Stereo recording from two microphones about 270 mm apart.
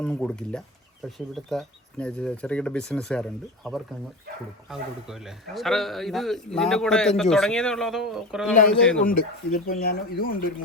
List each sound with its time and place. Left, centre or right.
0.0 s a man's voice: centre
9.0 s speech: left